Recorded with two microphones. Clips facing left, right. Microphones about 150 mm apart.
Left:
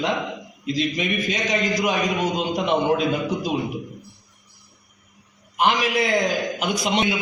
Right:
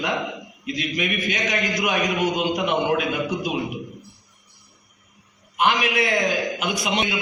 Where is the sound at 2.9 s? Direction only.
30° left (ahead or behind).